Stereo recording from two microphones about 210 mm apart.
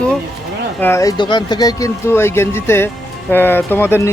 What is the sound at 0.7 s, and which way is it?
Speech, 10° left (ahead or behind).